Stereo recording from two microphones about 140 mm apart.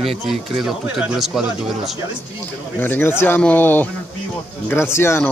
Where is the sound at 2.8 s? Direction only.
15° left (ahead or behind).